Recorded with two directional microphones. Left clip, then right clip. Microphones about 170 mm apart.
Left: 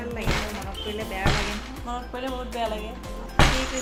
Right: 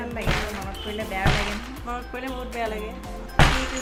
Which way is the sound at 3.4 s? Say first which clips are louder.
Right 1 dB; 45° right (ahead or behind).